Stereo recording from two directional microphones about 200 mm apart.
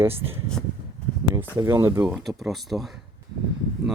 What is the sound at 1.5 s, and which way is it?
Speech, 15° right (ahead or behind).